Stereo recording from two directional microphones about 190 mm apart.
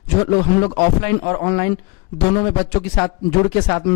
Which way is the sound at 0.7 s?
15° left (ahead or behind).